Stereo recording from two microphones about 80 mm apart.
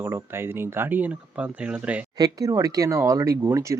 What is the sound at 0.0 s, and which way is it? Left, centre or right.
Speech, right.